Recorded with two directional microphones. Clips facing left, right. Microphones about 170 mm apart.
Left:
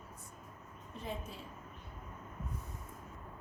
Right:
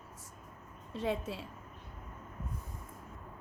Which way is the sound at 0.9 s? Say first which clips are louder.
Right 8 dB; 85° right.